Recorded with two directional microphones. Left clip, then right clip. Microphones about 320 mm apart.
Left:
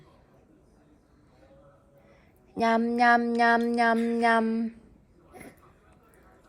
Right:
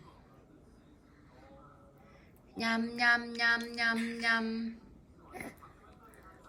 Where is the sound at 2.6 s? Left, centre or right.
Centre.